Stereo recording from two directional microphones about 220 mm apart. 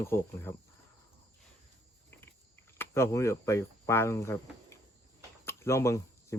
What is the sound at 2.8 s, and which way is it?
Speech, 10° left (ahead or behind).